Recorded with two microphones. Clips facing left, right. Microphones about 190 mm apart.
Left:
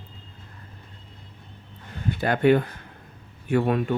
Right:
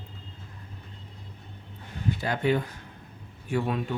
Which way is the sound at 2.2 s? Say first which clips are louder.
Left 8 dB; 60° left (ahead or behind).